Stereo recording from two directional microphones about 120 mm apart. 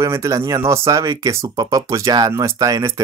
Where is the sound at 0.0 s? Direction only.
25° right (ahead or behind).